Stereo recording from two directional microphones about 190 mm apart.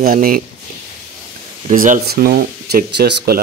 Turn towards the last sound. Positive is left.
turn(degrees=-55)  # may be behind; listen again after turning